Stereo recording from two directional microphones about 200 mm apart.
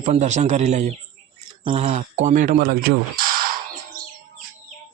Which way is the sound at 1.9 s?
40° right (ahead or behind).